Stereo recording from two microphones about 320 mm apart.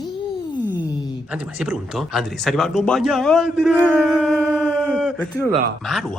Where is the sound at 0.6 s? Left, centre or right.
Centre.